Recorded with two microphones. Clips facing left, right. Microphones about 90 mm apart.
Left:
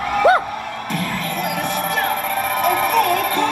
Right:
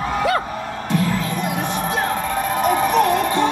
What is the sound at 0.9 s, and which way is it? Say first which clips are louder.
Music: right 4 dB; 25° right (ahead or behind).